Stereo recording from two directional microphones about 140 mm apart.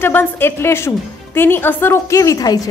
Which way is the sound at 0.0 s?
15° left (ahead or behind).